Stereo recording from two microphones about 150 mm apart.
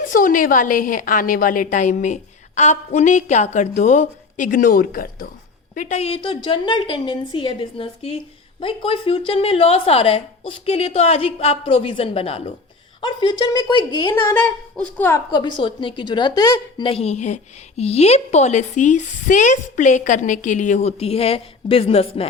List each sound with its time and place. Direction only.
0.1 s a woman's voice: 65° left (ahead or behind)
5.7 s a woman's voice: 55° left (ahead or behind)
13.0 s speech: 30° left (ahead or behind)
14.3 s speech: 10° left (ahead or behind)
15.3 s a woman's voice: 30° left (ahead or behind)